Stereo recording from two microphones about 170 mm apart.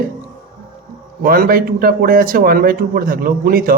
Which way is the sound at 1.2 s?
60° right (ahead or behind).